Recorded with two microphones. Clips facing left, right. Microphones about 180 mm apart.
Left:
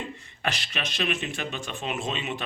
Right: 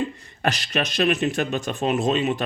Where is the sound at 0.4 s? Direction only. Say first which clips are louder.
Right 8 dB; 40° right (ahead or behind).